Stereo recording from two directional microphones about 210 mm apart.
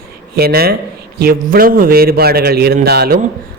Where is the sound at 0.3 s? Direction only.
45° right (ahead or behind).